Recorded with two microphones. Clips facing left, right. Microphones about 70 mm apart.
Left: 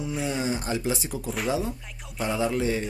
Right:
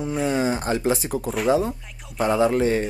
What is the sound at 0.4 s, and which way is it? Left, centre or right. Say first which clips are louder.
Speech: right 5 dB; right.